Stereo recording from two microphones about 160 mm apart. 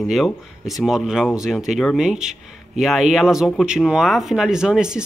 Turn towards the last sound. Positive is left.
turn(degrees=-5)  # may be behind; listen again after turning